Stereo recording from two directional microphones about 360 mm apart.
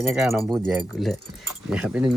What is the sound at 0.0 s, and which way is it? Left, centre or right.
Speech, centre.